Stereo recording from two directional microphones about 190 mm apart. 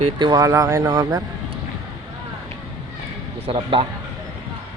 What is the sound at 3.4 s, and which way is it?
Speech, 30° right (ahead or behind).